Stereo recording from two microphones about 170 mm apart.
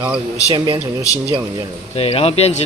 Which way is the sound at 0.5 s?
25° right (ahead or behind).